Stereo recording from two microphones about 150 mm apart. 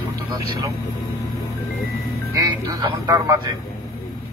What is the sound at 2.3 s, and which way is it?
Speech, 25° right (ahead or behind).